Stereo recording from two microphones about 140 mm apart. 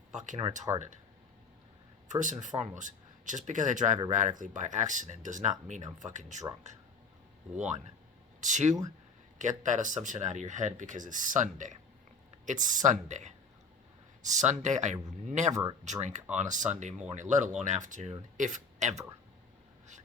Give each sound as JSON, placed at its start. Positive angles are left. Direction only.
{"t": 0.1, "sound": "speech", "side_deg": -60}
{"t": 2.0, "sound": "speech", "side_deg": -60}